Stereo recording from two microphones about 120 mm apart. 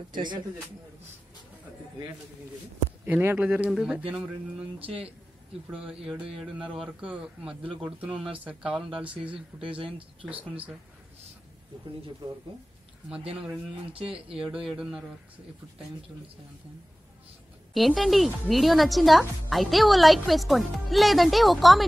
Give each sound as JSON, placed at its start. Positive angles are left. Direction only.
{"t": 3.1, "sound": "a man's voice", "side_deg": -15}
{"t": 4.7, "sound": "speech", "side_deg": -50}
{"t": 5.7, "sound": "a man's voice", "side_deg": -10}
{"t": 9.3, "sound": "speech", "side_deg": -45}
{"t": 13.9, "sound": "speech", "side_deg": -50}
{"t": 14.4, "sound": "a woman's voice", "side_deg": -5}
{"t": 17.7, "sound": "a woman's voice", "side_deg": 0}